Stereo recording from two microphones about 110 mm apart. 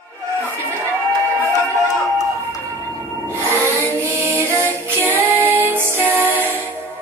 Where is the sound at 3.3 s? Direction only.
25° right (ahead or behind).